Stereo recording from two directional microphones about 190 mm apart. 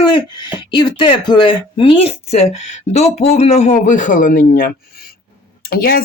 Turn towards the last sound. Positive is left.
turn(degrees=50)  # may be behind; listen again after turning